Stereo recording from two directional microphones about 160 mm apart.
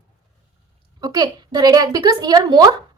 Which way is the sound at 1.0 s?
25° right (ahead or behind).